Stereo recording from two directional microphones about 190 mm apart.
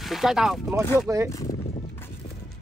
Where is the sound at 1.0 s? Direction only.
15° right (ahead or behind).